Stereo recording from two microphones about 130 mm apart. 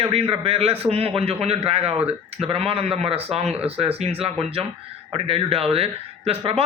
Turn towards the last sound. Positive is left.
turn(degrees=-50)  # may be behind; listen again after turning